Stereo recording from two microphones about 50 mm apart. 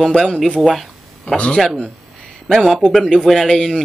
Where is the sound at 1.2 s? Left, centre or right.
Left.